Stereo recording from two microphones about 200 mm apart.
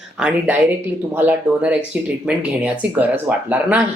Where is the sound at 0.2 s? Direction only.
5° right (ahead or behind).